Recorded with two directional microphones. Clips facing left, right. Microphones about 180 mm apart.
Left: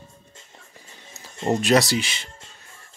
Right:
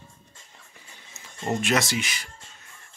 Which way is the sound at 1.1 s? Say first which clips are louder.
Left 5 dB; 35° left (ahead or behind).